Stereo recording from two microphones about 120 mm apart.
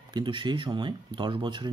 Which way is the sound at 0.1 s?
45° right (ahead or behind).